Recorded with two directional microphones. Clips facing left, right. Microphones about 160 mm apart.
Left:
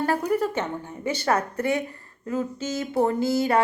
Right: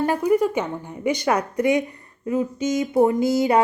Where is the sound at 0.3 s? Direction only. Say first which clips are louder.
Right 5 dB; 15° right (ahead or behind).